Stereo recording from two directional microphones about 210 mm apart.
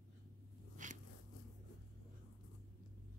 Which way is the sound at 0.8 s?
35° right (ahead or behind).